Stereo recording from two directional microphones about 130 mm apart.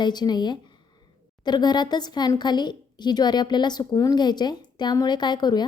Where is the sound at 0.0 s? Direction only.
35° left (ahead or behind).